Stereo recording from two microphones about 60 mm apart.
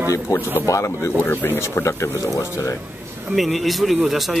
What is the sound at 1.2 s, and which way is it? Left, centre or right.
Speech, left.